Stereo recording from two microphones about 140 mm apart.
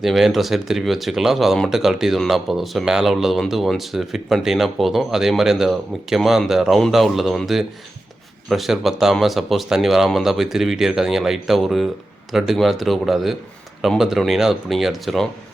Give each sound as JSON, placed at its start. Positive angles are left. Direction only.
{"t": 0.0, "sound": "speech", "side_deg": 0}